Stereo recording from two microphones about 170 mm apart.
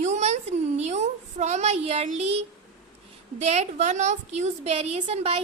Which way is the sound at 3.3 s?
40° right (ahead or behind).